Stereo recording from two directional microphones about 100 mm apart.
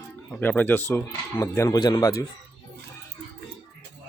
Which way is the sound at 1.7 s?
45° left (ahead or behind).